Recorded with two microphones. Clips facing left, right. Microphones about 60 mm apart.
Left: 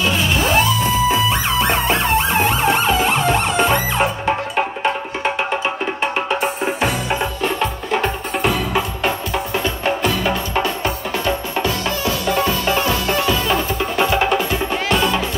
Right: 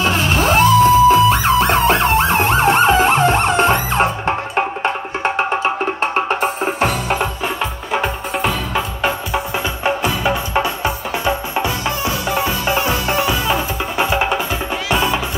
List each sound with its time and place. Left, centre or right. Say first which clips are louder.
0.0 s music: right 2 dB; right
6.1 s music: right 2 dB; right
7.4 s music: left 2 dB; centre
9.8 s music: right 2 dB; centre